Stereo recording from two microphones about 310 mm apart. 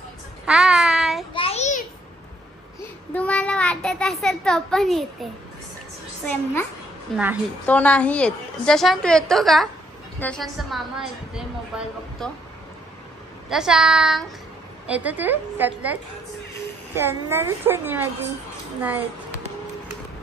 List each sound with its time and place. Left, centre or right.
0.5 s child singing: centre
1.3 s a sound: centre
3.1 s a child's voice: centre
7.1 s a woman's voice: centre
13.5 s a woman's voice: centre